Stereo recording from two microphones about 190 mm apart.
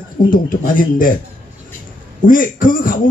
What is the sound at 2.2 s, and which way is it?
Speech, 45° left (ahead or behind).